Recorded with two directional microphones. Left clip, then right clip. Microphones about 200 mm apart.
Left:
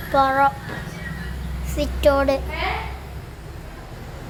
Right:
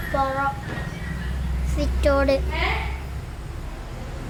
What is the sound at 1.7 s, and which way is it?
Child singing, 15° left (ahead or behind).